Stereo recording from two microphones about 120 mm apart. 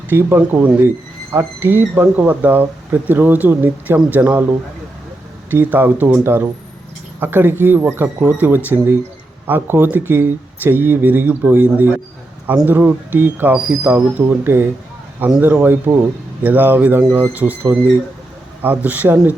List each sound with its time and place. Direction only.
0.1 s speech: 15° right (ahead or behind)
5.5 s speech: 15° right (ahead or behind)